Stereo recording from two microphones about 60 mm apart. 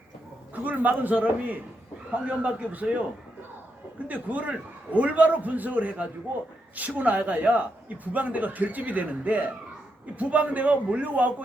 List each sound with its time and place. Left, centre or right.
0.5 s a man's voice: right
4.1 s a man's voice: right